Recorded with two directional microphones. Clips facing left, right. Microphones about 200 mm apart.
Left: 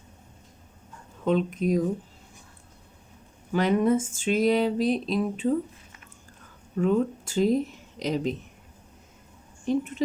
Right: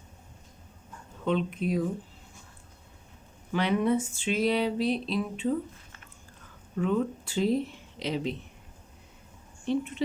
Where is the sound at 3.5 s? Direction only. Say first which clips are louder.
Left 3 dB; 40° left (ahead or behind).